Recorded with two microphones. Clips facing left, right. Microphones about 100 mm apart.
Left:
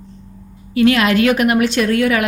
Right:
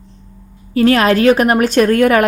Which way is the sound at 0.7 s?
40° right (ahead or behind).